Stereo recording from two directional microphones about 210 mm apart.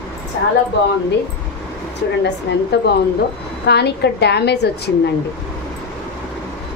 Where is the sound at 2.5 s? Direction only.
60° left (ahead or behind).